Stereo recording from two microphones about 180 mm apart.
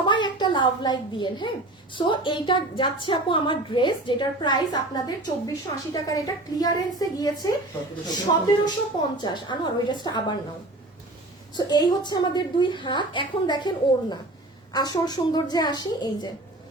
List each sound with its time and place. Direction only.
0.0 s a child's voice: 25° left (ahead or behind)
11.5 s a child's voice: 25° left (ahead or behind)